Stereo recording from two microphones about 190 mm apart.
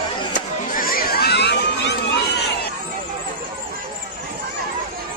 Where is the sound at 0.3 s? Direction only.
45° left (ahead or behind); by 2.0 s 65° left (ahead or behind).